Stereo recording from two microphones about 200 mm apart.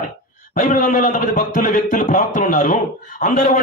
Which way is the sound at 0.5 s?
40° left (ahead or behind).